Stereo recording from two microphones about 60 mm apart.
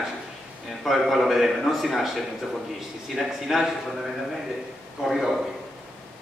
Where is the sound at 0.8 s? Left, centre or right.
Centre.